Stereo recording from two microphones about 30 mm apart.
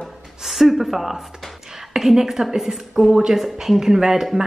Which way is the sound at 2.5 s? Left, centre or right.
Centre.